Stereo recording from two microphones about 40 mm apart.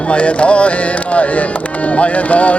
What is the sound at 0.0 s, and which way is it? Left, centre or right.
Music, left.